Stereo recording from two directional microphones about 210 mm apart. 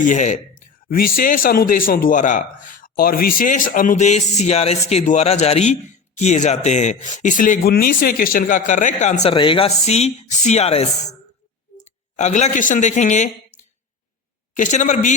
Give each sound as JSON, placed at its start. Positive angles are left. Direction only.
{"t": 0.0, "sound": "speech", "side_deg": 35}
{"t": 14.5, "sound": "speech", "side_deg": 35}